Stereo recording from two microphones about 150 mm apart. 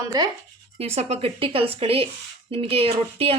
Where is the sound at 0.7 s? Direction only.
40° right (ahead or behind).